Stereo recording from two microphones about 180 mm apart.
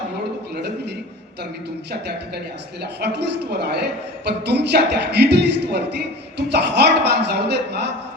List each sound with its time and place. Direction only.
0.5 s a man's voice: 65° right (ahead or behind)